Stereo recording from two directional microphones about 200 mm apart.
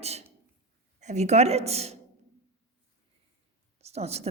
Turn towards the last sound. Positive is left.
turn(degrees=-30)  # may be behind; listen again after turning